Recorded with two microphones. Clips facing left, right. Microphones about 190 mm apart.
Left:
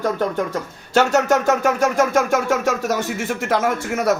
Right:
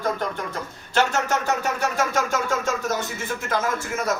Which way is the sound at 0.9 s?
45° left (ahead or behind).